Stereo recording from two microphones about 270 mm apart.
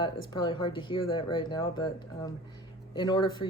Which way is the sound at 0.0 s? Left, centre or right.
Centre.